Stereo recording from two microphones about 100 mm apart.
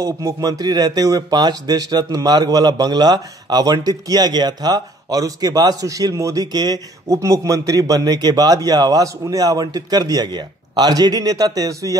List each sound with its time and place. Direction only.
0.0 s a man's voice: 40° right (ahead or behind)